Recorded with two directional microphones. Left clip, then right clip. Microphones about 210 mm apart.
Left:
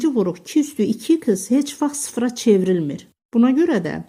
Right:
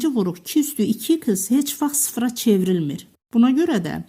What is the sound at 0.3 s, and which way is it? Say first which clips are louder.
Speech: left 1 dB; 50° right (ahead or behind).